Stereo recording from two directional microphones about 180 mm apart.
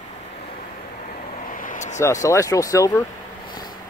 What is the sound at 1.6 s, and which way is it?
Vehicle, 45° left (ahead or behind).